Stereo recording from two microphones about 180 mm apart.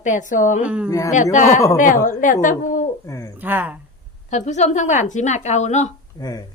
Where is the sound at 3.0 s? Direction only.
15° left (ahead or behind).